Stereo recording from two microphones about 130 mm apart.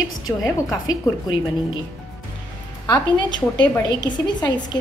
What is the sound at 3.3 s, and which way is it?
A woman's voice, 35° left (ahead or behind).